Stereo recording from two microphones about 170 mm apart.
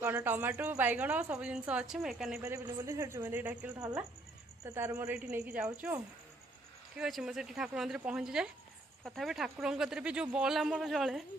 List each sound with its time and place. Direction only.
0.0 s a woman's voice: 10° right (ahead or behind)
2.4 s a woman's voice: 20° right (ahead or behind)
3.8 s a woman's voice: 20° right (ahead or behind); by 11.2 s centre (ahead or behind)